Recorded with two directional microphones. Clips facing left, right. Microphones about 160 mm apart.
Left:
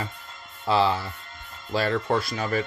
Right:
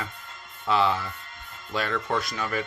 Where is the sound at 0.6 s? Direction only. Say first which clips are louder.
Left 2 dB; 30° left (ahead or behind).